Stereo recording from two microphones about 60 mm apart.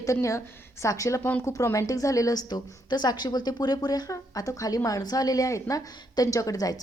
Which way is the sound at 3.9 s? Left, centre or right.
Left.